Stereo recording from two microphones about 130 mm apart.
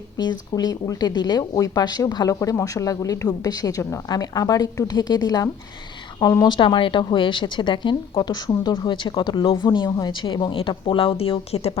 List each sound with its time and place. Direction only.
0.2 s speech: 30° left (ahead or behind); by 11.8 s 50° left (ahead or behind)